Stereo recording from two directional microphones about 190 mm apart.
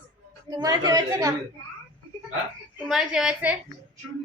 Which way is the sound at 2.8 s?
Centre (ahead or behind).